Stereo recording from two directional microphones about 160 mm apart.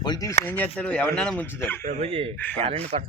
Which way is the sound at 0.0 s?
25° left (ahead or behind).